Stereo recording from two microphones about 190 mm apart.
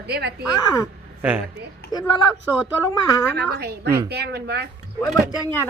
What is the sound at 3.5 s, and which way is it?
Speech, 60° right (ahead or behind).